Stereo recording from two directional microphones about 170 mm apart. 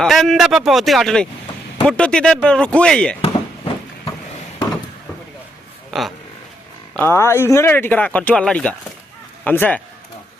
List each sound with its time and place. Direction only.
0.0 s speech: centre (ahead or behind)
3.2 s a sound: 35° left (ahead or behind)
5.9 s speech: centre (ahead or behind)
7.0 s speech: 15° left (ahead or behind)